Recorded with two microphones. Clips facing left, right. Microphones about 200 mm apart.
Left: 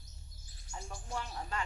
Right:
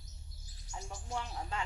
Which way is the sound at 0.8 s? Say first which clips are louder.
Right 1 dB; 20° right (ahead or behind).